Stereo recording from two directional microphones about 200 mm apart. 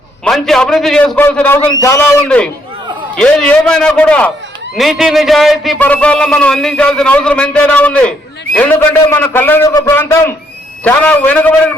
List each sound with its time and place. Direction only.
0.3 s a man's voice: centre (ahead or behind); by 2.0 s 15° left (ahead or behind)
2.0 s a man's voice: 5° left (ahead or behind)